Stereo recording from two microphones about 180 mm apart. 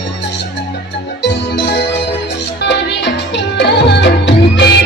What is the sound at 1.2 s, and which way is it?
Music, 75° left (ahead or behind).